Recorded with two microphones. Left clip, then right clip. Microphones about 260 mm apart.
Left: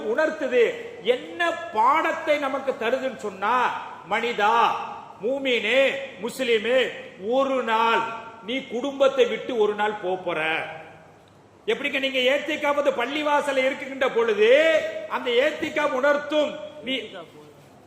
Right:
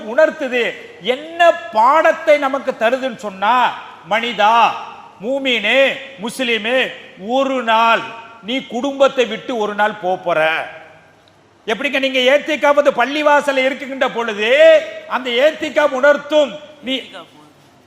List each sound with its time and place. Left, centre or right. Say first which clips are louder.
0.1 s a man's voice: right 8 dB; right
11.6 s a man's voice: right 7 dB; right